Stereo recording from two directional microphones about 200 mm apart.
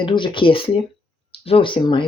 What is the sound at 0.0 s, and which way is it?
Speech, 25° left (ahead or behind).